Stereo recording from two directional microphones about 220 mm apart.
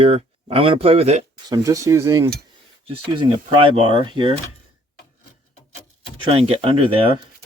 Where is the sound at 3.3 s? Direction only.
25° right (ahead or behind).